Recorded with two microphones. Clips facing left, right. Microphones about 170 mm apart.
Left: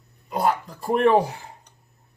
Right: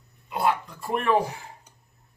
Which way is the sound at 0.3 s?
40° left (ahead or behind).